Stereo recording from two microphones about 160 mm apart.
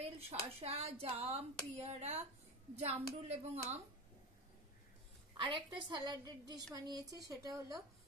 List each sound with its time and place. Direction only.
0.0 s speech: 40° right (ahead or behind)
5.4 s a woman's voice: 30° right (ahead or behind)